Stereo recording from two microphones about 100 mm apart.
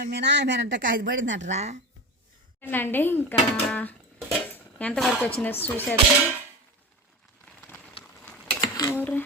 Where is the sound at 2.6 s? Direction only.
20° left (ahead or behind).